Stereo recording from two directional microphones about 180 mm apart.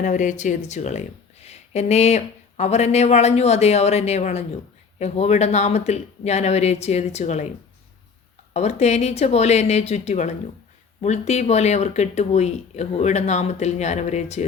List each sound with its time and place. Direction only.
0.0 s speech: 45° left (ahead or behind)
8.5 s speech: 40° left (ahead or behind)